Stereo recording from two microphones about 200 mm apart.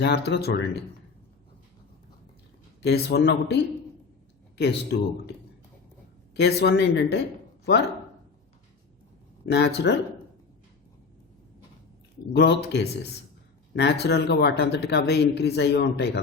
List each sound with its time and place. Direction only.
0.0 s speech: 55° left (ahead or behind)
2.8 s speech: 55° left (ahead or behind)
6.3 s speech: 55° left (ahead or behind)
9.5 s speech: 55° left (ahead or behind)
12.3 s speech: 55° left (ahead or behind)